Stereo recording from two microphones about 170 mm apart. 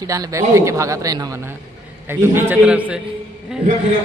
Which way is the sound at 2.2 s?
15° right (ahead or behind).